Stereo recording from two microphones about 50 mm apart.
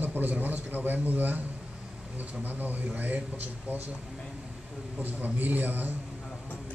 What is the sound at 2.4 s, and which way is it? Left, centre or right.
Speech, right.